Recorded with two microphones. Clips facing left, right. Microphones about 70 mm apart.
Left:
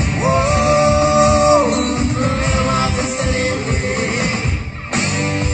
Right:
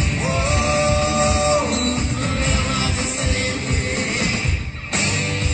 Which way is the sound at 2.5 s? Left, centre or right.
Left.